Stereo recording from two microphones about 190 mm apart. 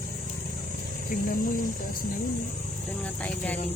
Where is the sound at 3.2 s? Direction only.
10° left (ahead or behind).